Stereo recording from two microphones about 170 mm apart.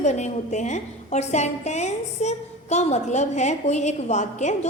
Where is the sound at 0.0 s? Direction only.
45° left (ahead or behind).